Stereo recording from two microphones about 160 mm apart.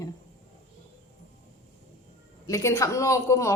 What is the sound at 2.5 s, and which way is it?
A woman's voice, 20° left (ahead or behind).